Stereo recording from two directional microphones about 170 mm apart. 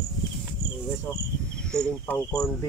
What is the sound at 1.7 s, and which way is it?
Speech, 5° left (ahead or behind).